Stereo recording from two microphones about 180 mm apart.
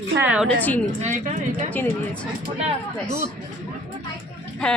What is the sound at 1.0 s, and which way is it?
Speech, 40° right (ahead or behind).